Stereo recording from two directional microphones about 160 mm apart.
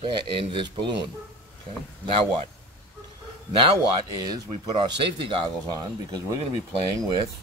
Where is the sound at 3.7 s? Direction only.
25° right (ahead or behind).